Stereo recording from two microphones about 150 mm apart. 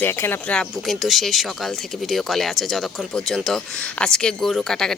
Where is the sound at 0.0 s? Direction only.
15° left (ahead or behind).